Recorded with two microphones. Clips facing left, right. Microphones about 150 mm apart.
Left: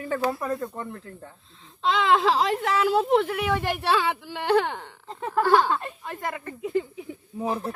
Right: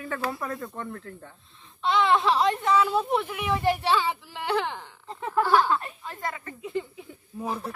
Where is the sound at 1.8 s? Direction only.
90° left; by 4.9 s 60° left (ahead or behind).